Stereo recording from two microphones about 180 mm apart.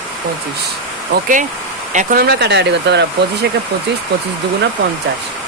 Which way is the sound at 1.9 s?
45° right (ahead or behind).